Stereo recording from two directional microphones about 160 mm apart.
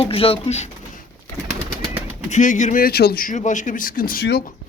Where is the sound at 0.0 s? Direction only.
35° left (ahead or behind).